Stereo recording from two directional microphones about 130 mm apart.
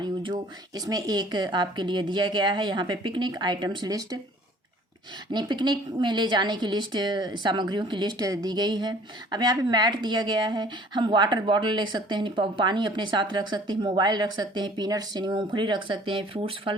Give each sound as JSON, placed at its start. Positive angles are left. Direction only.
{"t": 0.0, "sound": "a woman's voice", "side_deg": -35}
{"t": 5.3, "sound": "a woman's voice", "side_deg": -35}